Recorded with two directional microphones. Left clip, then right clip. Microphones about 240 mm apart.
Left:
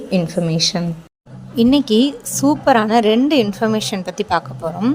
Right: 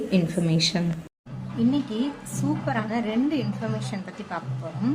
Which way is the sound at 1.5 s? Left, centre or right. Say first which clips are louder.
Left 12 dB; left.